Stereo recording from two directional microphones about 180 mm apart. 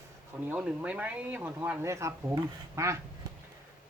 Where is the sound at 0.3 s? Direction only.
10° right (ahead or behind).